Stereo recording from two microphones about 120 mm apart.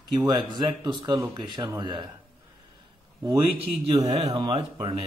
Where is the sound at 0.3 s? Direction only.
35° right (ahead or behind).